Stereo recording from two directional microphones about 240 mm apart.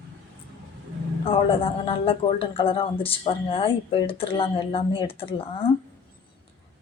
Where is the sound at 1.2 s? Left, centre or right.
Left.